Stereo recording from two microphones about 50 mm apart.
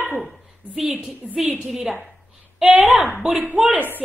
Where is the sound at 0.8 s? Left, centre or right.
Centre.